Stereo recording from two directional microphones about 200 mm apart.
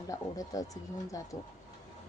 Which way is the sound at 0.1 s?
15° left (ahead or behind).